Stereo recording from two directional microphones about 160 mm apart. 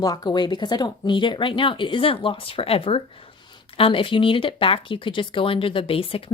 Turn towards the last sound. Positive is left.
turn(degrees=35)  # may be behind; listen again after turning